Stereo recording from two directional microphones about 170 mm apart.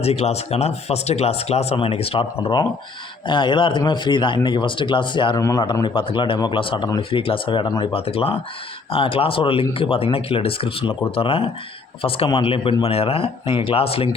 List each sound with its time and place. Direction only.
0.0 s speech: 40° left (ahead or behind)